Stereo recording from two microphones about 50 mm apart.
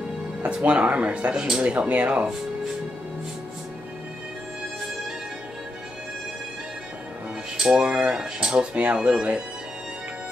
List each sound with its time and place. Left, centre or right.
0.4 s speech: right
1.3 s speech: centre
7.5 s dishes: centre
7.8 s speech: centre
8.7 s speech: right